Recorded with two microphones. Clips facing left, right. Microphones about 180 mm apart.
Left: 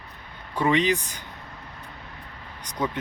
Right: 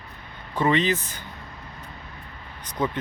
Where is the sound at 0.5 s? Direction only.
10° left (ahead or behind).